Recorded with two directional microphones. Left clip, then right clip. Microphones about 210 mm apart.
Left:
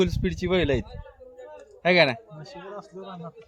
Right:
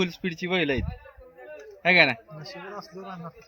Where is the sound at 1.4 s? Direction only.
45° left (ahead or behind).